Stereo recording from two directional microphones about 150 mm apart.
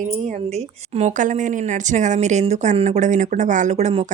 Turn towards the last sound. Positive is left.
turn(degrees=-45)  # may be behind; listen again after turning